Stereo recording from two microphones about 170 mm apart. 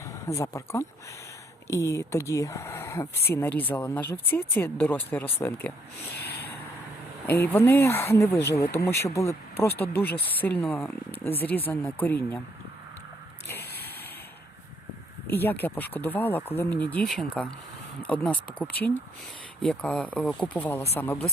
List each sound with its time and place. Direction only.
0.0 s speech: 15° left (ahead or behind)
7.3 s speech: 10° left (ahead or behind)
13.5 s a sound: 15° left (ahead or behind)
15.3 s speech: 10° left (ahead or behind)